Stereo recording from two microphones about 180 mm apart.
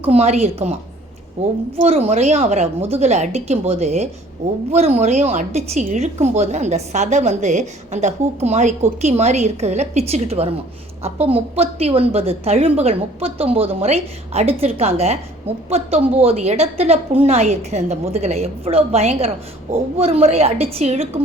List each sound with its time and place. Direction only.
0.0 s a woman's voice: 35° right (ahead or behind)
1.8 s a woman's voice: 35° right (ahead or behind)